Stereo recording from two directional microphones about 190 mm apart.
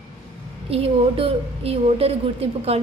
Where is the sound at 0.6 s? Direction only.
30° right (ahead or behind).